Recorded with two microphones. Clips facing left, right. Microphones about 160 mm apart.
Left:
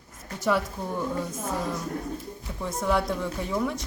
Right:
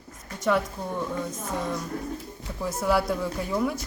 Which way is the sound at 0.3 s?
Centre (ahead or behind).